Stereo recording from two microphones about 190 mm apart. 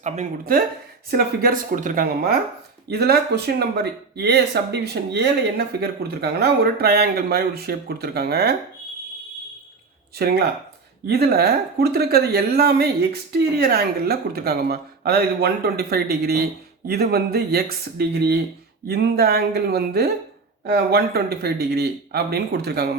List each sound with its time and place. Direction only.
0.0 s speech: 45° right (ahead or behind)
10.2 s speech: 55° right (ahead or behind)